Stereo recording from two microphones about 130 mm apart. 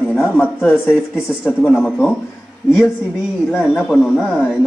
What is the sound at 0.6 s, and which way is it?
Speech, 15° left (ahead or behind).